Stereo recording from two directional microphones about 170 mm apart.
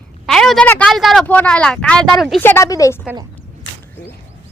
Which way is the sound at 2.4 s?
15° left (ahead or behind).